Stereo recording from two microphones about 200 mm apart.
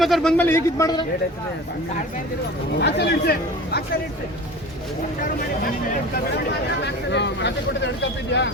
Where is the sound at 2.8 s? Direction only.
55° left (ahead or behind).